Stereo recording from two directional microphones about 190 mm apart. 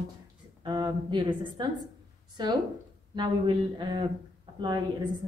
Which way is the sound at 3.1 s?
25° right (ahead or behind).